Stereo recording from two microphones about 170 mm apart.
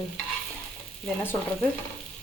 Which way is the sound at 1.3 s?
15° left (ahead or behind).